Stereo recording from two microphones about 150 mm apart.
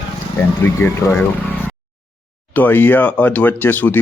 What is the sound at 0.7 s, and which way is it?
Speech, 15° left (ahead or behind).